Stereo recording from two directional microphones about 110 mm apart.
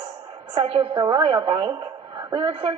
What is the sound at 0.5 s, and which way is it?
A woman's voice, 55° right (ahead or behind).